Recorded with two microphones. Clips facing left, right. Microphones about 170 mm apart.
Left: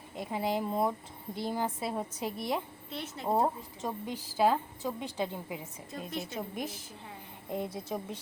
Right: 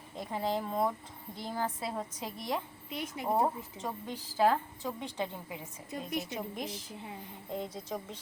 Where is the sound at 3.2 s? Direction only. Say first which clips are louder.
Left 1 dB; 20° left (ahead or behind).